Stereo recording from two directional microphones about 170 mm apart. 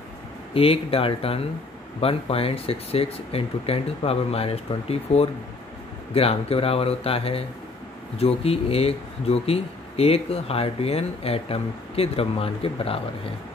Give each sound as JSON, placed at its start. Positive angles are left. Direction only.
{"t": 0.6, "sound": "speech", "side_deg": 35}